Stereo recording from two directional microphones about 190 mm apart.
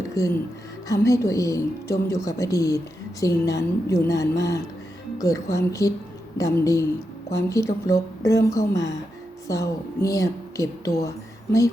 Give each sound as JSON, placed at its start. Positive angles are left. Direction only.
{"t": 0.2, "sound": "speech", "side_deg": 15}